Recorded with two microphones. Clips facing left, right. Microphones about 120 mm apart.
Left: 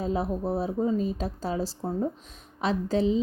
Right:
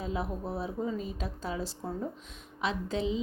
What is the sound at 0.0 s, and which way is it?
Speech, 35° left (ahead or behind).